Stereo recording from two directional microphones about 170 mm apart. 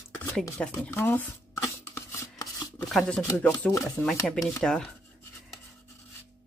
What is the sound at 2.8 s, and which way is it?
Speech, 5° left (ahead or behind).